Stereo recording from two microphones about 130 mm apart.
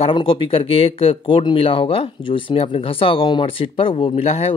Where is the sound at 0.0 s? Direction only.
40° left (ahead or behind).